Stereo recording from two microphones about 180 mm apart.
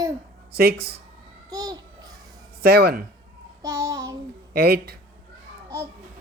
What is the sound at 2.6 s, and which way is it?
Speech, 60° right (ahead or behind).